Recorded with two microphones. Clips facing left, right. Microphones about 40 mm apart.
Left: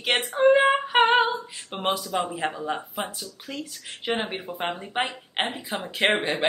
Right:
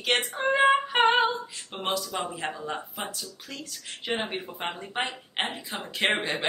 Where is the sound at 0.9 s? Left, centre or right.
Centre.